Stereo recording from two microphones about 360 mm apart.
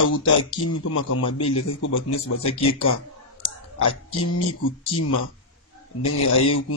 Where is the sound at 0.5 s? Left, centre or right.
Left.